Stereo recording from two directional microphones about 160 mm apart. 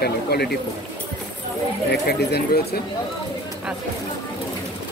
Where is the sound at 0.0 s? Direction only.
90° left.